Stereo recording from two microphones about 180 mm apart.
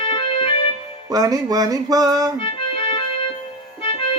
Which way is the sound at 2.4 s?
30° left (ahead or behind).